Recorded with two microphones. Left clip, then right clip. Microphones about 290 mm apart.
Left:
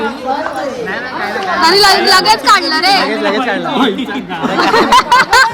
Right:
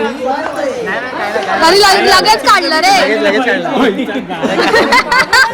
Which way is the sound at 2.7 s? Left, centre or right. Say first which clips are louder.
Right 2 dB; centre.